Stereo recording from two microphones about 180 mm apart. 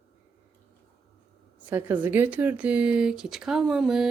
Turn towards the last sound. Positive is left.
turn(degrees=0)  # may be behind; listen again after turning